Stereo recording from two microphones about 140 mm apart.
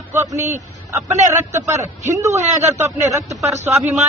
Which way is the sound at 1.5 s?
55° right (ahead or behind).